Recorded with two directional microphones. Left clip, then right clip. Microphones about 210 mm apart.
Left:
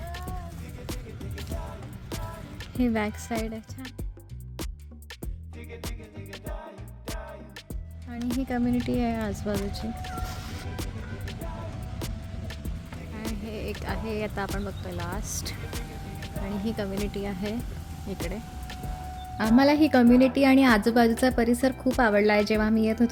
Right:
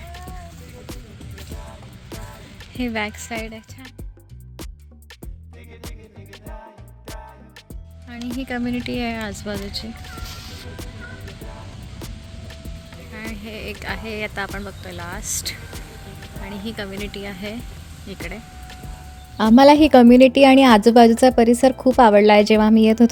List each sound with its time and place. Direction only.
0.1 s music: centre (ahead or behind)
2.7 s speech: 10° left (ahead or behind)
8.3 s speech: centre (ahead or behind)
11.9 s vehicle: centre (ahead or behind)
13.1 s speech: centre (ahead or behind)
18.1 s vehicle: centre (ahead or behind)
19.5 s a woman's voice: 35° right (ahead or behind)